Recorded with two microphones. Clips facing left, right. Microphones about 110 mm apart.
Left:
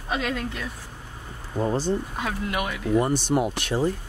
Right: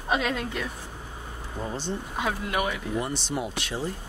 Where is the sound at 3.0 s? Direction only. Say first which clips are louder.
Left 7 dB; 50° left (ahead or behind).